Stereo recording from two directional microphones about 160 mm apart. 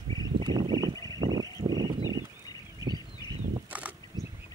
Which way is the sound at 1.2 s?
25° right (ahead or behind).